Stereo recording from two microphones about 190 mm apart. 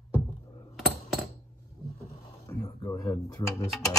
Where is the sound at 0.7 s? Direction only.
Centre (ahead or behind).